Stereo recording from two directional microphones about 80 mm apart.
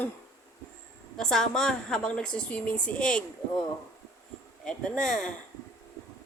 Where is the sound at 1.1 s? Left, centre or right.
Centre.